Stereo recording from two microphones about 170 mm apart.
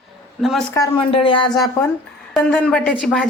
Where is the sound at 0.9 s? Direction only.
30° left (ahead or behind).